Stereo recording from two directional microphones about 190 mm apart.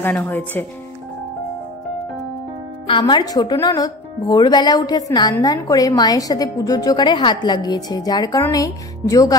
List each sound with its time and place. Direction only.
0.0 s speech: 10° left (ahead or behind)
2.9 s speech: 25° left (ahead or behind)